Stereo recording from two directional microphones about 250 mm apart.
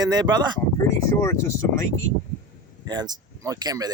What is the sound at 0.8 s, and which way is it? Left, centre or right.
Speech, centre.